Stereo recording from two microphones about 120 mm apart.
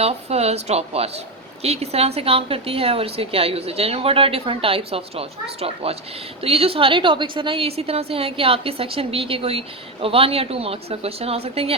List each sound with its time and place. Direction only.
0.0 s a woman's voice: 60° right (ahead or behind)